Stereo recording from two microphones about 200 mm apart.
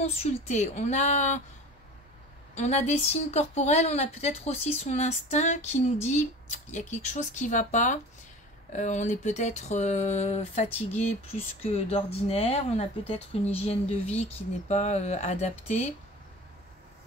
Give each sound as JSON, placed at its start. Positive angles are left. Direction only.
{"t": 0.0, "sound": "a woman's voice", "side_deg": 30}
{"t": 2.5, "sound": "a woman's voice", "side_deg": 35}